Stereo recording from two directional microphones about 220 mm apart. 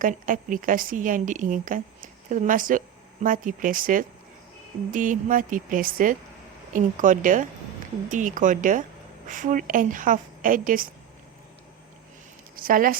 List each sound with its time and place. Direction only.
0.0 s a woman's voice: 35° right (ahead or behind)
12.5 s speech: 40° right (ahead or behind)